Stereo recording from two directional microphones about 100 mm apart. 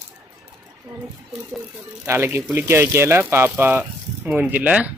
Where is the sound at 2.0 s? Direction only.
25° right (ahead or behind).